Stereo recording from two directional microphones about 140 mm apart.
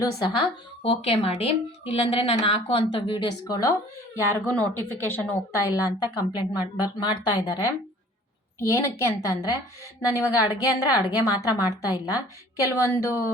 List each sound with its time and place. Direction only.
0.3 s speech: 40° left (ahead or behind)
4.3 s a woman's voice: 10° left (ahead or behind)